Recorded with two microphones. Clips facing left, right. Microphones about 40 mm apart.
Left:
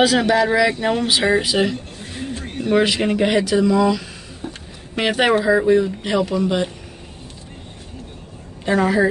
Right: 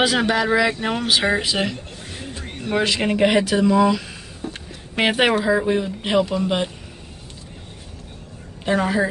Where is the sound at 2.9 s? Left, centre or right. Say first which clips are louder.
Even; centre.